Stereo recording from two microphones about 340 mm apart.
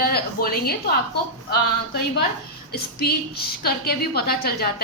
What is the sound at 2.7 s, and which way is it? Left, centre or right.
A woman's voice, left.